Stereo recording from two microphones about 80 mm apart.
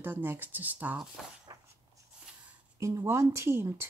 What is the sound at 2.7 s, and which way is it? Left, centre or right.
Speech, right.